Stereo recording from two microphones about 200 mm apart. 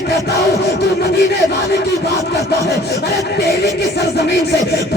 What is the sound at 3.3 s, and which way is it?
Speech, 55° left (ahead or behind).